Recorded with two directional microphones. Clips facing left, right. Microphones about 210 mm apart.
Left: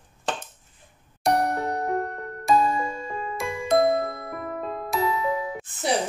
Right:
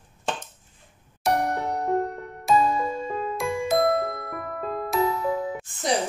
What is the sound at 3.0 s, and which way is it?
Music, centre (ahead or behind).